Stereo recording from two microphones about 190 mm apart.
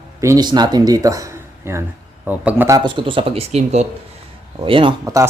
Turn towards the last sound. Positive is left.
turn(degrees=-20)  # may be behind; listen again after turning